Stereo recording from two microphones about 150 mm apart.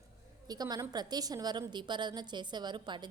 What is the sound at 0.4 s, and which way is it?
A woman's voice, 25° right (ahead or behind).